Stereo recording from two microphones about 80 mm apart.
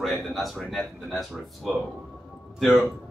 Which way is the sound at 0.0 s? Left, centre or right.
Centre.